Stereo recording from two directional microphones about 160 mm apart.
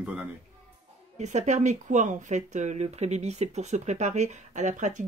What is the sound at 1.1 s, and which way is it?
Speech, 45° right (ahead or behind).